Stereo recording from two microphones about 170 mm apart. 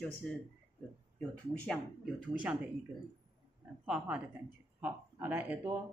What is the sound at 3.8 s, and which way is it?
Speech, 5° right (ahead or behind).